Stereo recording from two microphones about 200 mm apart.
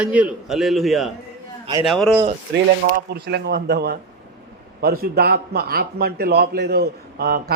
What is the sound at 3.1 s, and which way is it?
A man's voice, 55° right (ahead or behind).